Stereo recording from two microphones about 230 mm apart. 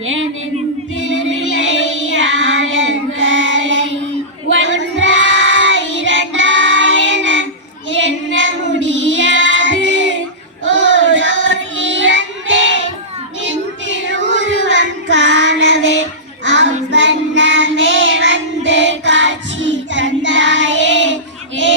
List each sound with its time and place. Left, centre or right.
0.0 s female singing: right
1.0 s child singing: right